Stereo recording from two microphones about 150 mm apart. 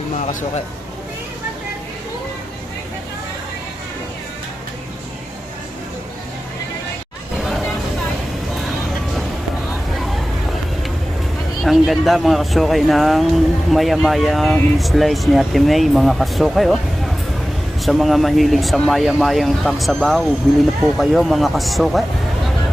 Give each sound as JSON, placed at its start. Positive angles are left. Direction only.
{"t": 0.2, "sound": "speech", "side_deg": 50}
{"t": 9.9, "sound": "vehicle", "side_deg": 0}
{"t": 11.6, "sound": "speech", "side_deg": 0}